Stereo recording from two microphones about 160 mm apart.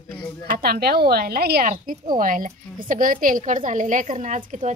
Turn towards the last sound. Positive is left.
turn(degrees=-50)  # may be behind; listen again after turning